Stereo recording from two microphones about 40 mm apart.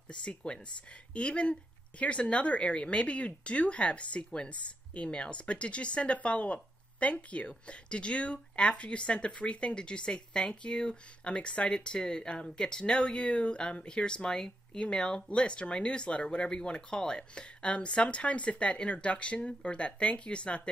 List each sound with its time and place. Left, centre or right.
0.1 s speech: left